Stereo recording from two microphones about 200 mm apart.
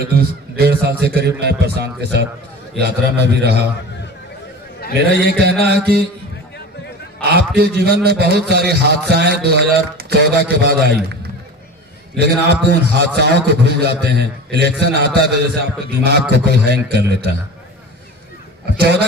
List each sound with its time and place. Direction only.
0.1 s a man's voice: 50° right (ahead or behind)
4.9 s a man's voice: 55° right (ahead or behind)
7.2 s a man's voice: 55° right (ahead or behind)
18.8 s a man's voice: 55° right (ahead or behind)